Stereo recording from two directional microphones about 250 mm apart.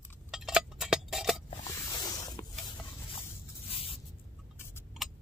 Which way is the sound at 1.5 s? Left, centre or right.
Centre.